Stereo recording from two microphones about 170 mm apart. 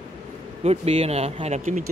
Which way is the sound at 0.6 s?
40° right (ahead or behind).